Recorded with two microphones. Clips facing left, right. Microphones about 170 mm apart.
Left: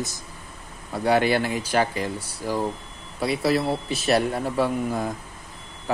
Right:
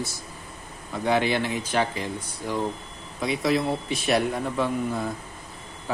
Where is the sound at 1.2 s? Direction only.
10° left (ahead or behind).